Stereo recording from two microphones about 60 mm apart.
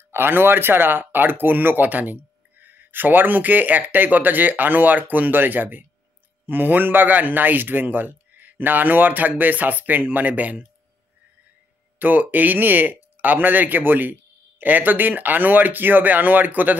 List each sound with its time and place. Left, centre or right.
0.1 s speech: right
12.0 s speech: right